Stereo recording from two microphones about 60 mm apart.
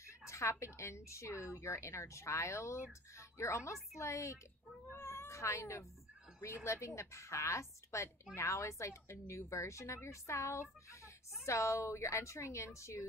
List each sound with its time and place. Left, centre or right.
0.3 s a sound: left
0.7 s speech: left
4.9 s a woman's voice: left